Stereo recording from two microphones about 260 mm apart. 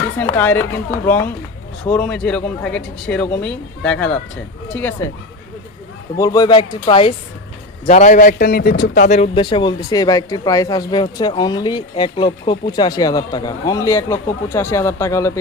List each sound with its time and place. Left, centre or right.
0.3 s a man's voice: centre
6.1 s a man's voice: centre; by 9.0 s left
9.0 s speech: left